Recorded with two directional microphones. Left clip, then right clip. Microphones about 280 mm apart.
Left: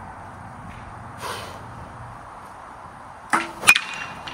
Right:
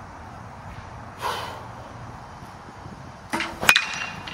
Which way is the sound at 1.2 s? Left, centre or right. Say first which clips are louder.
Right 4 dB; centre.